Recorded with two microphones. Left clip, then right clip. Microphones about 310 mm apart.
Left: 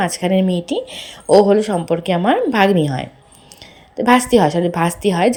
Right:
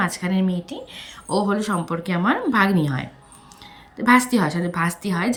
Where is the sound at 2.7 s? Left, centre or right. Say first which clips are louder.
Left 7 dB; centre.